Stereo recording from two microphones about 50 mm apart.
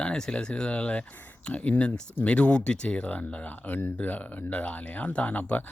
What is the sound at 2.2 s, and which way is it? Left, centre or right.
Speech, left.